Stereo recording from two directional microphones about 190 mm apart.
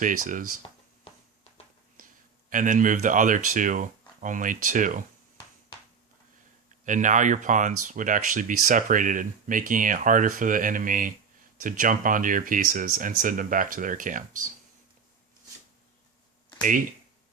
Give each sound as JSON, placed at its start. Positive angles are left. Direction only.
{"t": 0.0, "sound": "speech", "side_deg": -45}
{"t": 2.5, "sound": "speech", "side_deg": -45}
{"t": 6.8, "sound": "speech", "side_deg": -40}
{"t": 16.6, "sound": "speech", "side_deg": -45}